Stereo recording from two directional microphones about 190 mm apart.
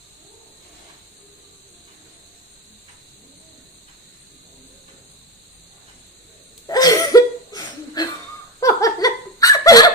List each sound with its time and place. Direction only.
6.7 s laughter: 20° left (ahead or behind)